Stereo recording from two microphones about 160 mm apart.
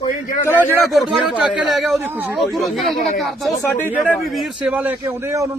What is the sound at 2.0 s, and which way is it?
Speech, 15° right (ahead or behind).